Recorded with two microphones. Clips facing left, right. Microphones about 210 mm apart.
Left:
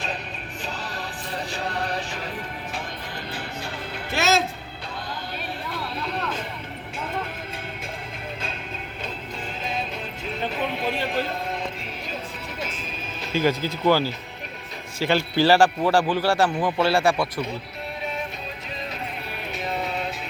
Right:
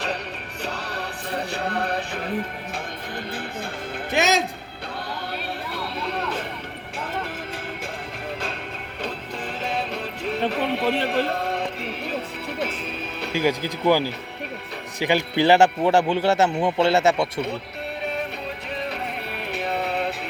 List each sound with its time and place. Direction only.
0.6 s music: 65° right (ahead or behind)
4.1 s speech: 15° right (ahead or behind)
9.6 s music: 70° right (ahead or behind)
13.3 s a man's voice: 15° right (ahead or behind)
19.5 s music: 65° right (ahead or behind)